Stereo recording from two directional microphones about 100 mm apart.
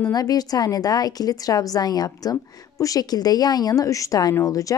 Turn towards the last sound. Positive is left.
turn(degrees=35)  # may be behind; listen again after turning